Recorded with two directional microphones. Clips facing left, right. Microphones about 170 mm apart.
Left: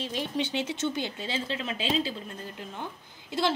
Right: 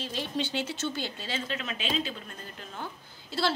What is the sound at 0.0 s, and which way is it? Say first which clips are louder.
A woman's voice: left 2 dB; 15° left (ahead or behind).